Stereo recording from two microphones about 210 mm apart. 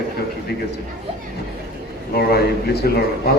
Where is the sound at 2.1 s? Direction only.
50° left (ahead or behind).